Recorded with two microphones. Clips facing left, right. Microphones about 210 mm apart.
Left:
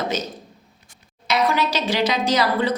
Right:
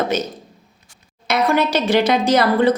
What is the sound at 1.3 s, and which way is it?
A woman's voice, 55° right (ahead or behind).